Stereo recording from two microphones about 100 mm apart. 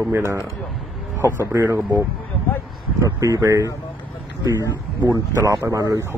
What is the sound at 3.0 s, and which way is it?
Speech, 30° right (ahead or behind).